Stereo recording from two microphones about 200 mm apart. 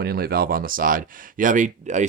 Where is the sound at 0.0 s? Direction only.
50° right (ahead or behind).